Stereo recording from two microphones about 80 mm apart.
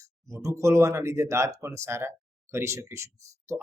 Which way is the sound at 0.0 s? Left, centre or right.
Right.